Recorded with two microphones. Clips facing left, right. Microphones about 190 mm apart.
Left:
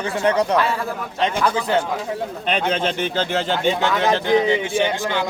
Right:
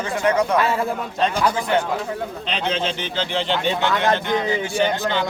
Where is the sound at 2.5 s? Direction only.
50° left (ahead or behind).